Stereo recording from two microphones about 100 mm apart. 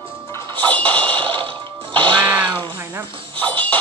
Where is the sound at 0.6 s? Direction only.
15° left (ahead or behind).